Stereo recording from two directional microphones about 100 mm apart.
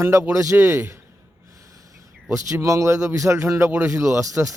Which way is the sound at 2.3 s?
30° right (ahead or behind).